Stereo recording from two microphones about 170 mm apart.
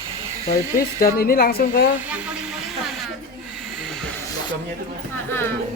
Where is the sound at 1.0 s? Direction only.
60° left (ahead or behind).